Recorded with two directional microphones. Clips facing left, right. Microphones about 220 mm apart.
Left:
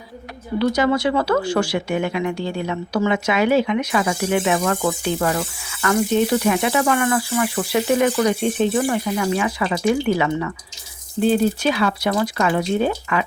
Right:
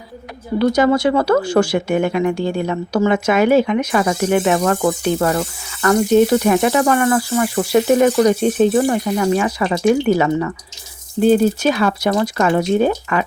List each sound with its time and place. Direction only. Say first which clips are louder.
0.6 s speech: right 4 dB; 45° right (ahead or behind)